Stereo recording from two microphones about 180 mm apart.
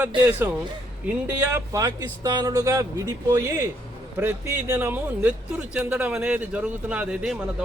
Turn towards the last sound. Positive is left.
turn(degrees=-5)  # may be behind; listen again after turning